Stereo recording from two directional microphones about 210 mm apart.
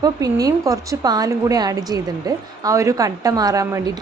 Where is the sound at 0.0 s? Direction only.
15° right (ahead or behind).